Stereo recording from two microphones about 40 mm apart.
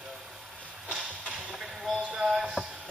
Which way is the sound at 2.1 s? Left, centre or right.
Centre.